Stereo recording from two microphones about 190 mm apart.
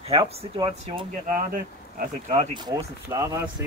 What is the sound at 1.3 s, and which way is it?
Speech, 45° right (ahead or behind).